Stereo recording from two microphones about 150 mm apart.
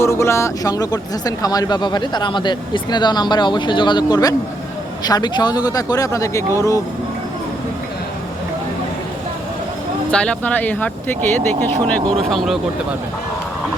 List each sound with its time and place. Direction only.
0.0 s speech: 20° left (ahead or behind)
10.1 s speech: 5° left (ahead or behind)